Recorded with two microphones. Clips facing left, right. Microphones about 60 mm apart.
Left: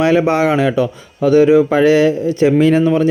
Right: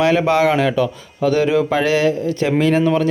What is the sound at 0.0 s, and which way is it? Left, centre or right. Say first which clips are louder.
Speech: left 2 dB; left.